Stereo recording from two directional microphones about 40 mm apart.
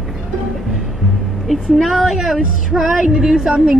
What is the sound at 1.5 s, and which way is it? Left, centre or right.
Speech, centre.